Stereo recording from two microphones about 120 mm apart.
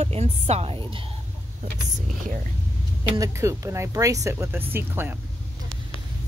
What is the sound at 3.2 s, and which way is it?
Speech, 25° right (ahead or behind).